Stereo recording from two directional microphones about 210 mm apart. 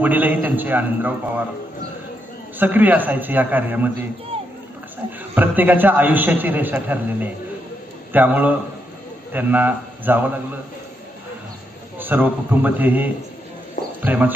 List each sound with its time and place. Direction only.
0.0 s a man's voice: 10° right (ahead or behind)
2.6 s a man's voice: 10° right (ahead or behind)
4.3 s a sound: 25° right (ahead or behind)
5.3 s a man's voice: 10° right (ahead or behind)
11.9 s a man's voice: 10° right (ahead or behind)